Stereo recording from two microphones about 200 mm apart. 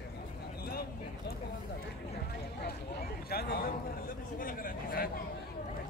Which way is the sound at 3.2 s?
50° left (ahead or behind).